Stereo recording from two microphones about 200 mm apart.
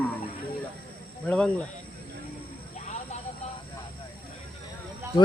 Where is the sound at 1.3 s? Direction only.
5° left (ahead or behind).